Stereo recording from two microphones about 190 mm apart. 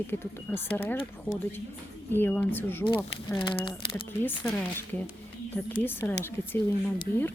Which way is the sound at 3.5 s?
25° left (ahead or behind).